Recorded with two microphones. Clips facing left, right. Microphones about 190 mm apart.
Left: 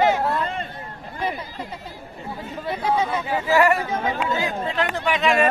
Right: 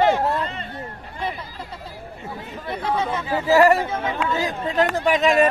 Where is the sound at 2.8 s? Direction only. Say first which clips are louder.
Left 1 dB; 15° left (ahead or behind).